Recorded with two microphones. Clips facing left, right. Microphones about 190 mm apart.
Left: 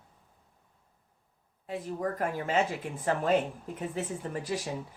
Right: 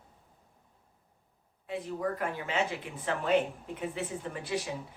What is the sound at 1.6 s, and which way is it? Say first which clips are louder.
Speech: even; 40° left (ahead or behind).